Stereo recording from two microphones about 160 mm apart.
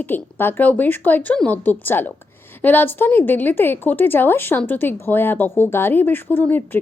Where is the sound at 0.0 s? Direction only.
10° left (ahead or behind).